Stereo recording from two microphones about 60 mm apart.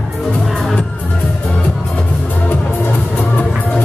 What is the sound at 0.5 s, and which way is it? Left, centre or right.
Music, centre.